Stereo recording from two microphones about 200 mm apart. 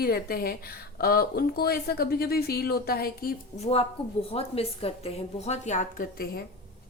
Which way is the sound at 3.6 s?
30° left (ahead or behind).